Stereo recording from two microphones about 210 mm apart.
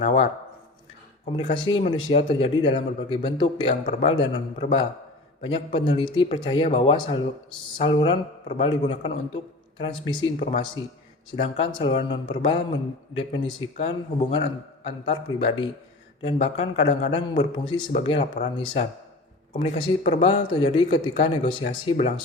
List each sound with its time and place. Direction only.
0.0 s a man's voice: 30° left (ahead or behind)
1.4 s a man's voice: 25° left (ahead or behind)